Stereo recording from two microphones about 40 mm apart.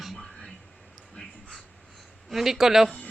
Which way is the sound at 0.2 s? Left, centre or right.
Centre.